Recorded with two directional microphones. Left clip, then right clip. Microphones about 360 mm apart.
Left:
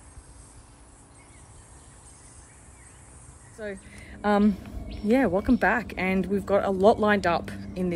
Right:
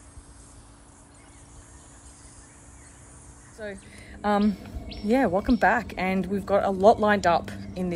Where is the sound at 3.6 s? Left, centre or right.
Centre.